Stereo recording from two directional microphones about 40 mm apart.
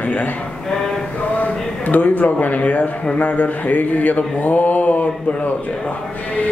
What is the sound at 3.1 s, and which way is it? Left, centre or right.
Mantra, left.